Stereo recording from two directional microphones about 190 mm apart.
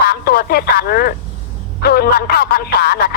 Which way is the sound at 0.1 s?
55° left (ahead or behind).